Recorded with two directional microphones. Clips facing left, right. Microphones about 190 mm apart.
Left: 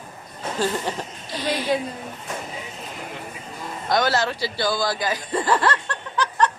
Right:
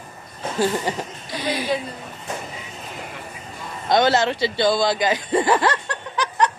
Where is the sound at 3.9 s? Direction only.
25° right (ahead or behind).